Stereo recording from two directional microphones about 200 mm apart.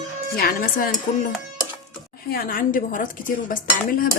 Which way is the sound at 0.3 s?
45° left (ahead or behind).